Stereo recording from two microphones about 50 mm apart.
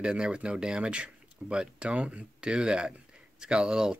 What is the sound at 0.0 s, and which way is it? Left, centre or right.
Speech, centre.